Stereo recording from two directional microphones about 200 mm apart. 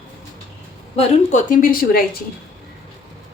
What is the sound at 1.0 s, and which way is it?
A woman's voice, 40° left (ahead or behind).